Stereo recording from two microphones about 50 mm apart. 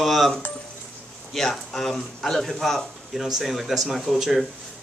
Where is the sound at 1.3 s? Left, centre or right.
Centre.